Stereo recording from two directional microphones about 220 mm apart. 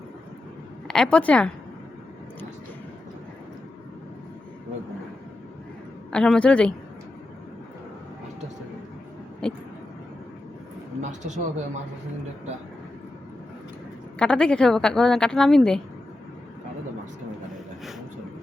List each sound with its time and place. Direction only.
0.9 s a woman's voice: 5° left (ahead or behind)
6.1 s speech: 5° left (ahead or behind)
9.4 s a sound: 5° left (ahead or behind)
11.0 s speech: 30° right (ahead or behind)
14.2 s speech: 5° left (ahead or behind)